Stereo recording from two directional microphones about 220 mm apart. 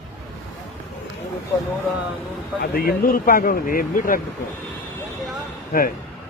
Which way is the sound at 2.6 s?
45° left (ahead or behind).